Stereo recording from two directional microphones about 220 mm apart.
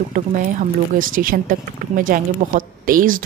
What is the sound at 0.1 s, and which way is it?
Speech, 35° right (ahead or behind).